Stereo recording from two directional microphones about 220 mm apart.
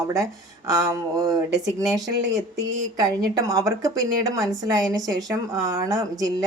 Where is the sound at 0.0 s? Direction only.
15° right (ahead or behind).